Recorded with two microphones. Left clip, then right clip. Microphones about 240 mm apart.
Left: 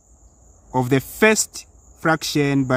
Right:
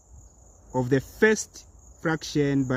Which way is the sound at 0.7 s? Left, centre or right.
Left.